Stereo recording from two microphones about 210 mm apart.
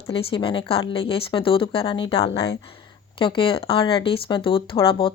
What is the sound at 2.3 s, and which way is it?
Speech, 55° left (ahead or behind).